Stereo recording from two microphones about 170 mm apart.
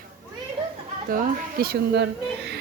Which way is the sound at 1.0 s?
55° right (ahead or behind).